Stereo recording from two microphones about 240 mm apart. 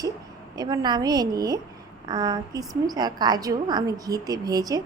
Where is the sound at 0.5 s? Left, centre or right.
Centre.